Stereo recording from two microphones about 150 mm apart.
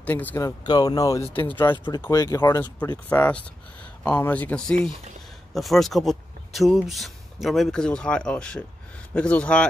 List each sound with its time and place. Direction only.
0.0 s speech: 10° left (ahead or behind)
0.4 s speech: 25° left (ahead or behind); by 9.7 s 5° left (ahead or behind)